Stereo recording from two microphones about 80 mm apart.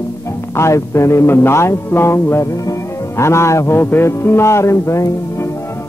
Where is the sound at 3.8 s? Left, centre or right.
Left.